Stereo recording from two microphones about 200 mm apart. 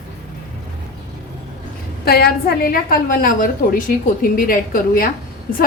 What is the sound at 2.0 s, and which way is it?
A woman's voice, 50° left (ahead or behind).